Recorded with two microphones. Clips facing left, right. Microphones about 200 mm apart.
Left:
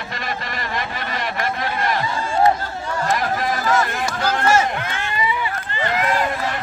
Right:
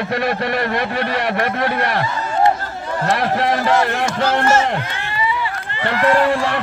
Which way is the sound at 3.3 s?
70° right (ahead or behind).